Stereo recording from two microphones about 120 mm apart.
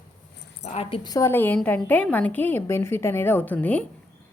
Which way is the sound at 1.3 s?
15° left (ahead or behind).